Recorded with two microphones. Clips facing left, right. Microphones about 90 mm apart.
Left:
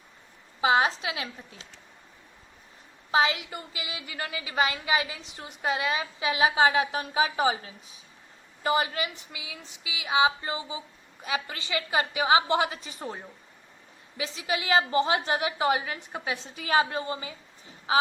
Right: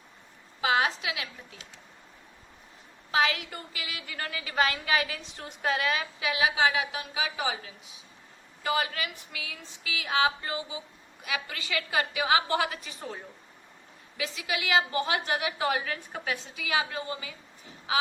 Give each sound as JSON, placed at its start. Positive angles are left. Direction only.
{"t": 0.6, "sound": "a woman's voice", "side_deg": 25}
{"t": 3.1, "sound": "a woman's voice", "side_deg": 25}
{"t": 14.2, "sound": "a woman's voice", "side_deg": 30}
{"t": 16.6, "sound": "a woman's voice", "side_deg": 40}